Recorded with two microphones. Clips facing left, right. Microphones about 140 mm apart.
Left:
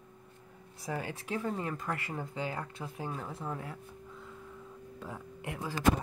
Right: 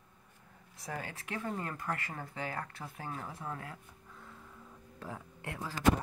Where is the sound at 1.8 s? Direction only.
25° left (ahead or behind).